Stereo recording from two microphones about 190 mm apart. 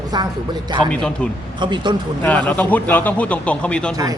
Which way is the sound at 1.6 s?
25° right (ahead or behind).